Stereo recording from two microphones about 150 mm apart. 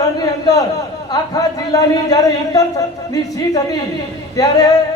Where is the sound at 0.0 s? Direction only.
25° left (ahead or behind).